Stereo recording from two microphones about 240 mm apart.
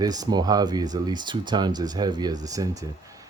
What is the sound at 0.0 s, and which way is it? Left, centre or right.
Speech, centre.